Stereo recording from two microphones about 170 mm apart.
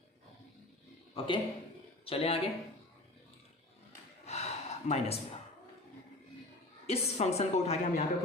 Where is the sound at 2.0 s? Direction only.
35° left (ahead or behind).